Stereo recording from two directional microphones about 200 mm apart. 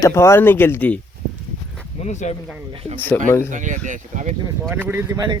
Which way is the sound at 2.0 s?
35° left (ahead or behind).